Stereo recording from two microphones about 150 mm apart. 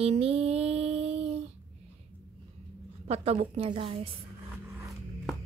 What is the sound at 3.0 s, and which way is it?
Speech, 45° right (ahead or behind).